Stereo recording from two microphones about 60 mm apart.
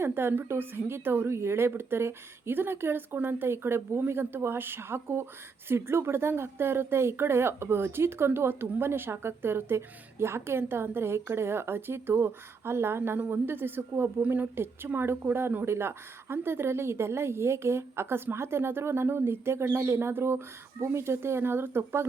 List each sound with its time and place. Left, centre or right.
0.0 s a woman's voice: right